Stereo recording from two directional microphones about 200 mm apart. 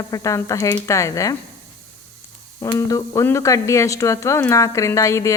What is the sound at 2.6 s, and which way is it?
Speech, 15° left (ahead or behind).